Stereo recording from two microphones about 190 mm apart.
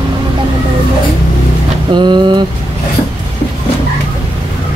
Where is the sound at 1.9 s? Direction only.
25° right (ahead or behind).